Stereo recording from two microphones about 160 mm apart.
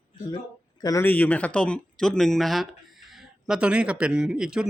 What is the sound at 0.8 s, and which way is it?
Speech, 25° left (ahead or behind).